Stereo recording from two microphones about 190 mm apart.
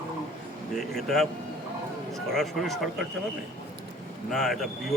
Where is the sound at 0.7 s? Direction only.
Centre (ahead or behind).